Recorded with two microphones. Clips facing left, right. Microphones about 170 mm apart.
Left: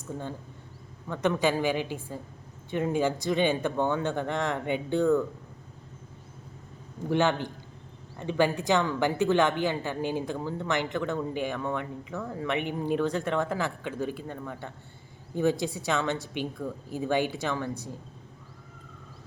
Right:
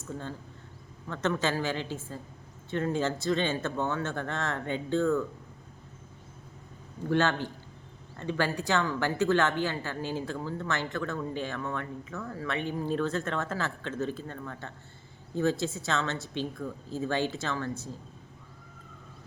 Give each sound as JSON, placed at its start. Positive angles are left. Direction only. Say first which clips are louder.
{"t": 1.0, "sound": "speech", "louder": "left 3 dB", "side_deg": 15}
{"t": 7.1, "sound": "speech", "louder": "left 2 dB", "side_deg": 15}